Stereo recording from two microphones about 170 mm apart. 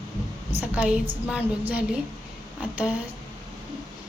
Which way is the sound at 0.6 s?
5° right (ahead or behind).